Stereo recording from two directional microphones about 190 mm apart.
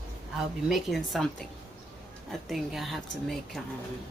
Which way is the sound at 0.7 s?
Centre (ahead or behind).